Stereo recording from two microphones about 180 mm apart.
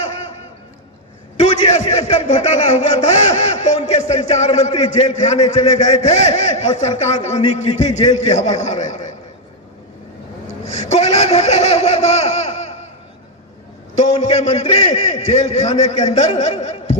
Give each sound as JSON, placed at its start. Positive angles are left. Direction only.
{"t": 1.4, "sound": "a man's voice", "side_deg": 40}
{"t": 10.6, "sound": "laughter", "side_deg": 40}
{"t": 13.9, "sound": "a man's voice", "side_deg": 40}